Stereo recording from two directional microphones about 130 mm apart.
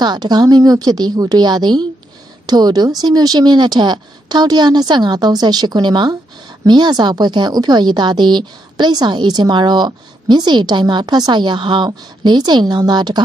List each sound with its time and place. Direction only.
0.0 s a woman's voice: 35° right (ahead or behind)